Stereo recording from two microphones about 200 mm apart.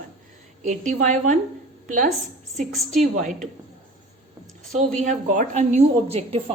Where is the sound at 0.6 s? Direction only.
40° right (ahead or behind).